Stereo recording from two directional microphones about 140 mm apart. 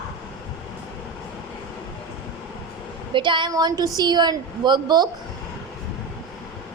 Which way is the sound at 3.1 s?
35° right (ahead or behind).